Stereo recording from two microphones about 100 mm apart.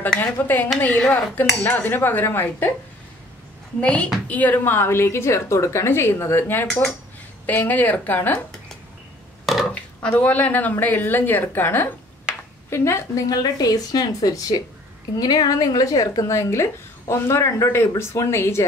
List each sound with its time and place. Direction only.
0.2 s a woman's voice: 20° left (ahead or behind)
3.8 s a woman's voice: 10° left (ahead or behind)
9.5 s a sound: centre (ahead or behind)
10.0 s a woman's voice: 15° left (ahead or behind)